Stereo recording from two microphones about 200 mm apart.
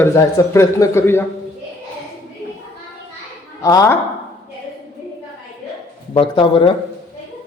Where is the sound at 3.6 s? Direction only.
15° left (ahead or behind).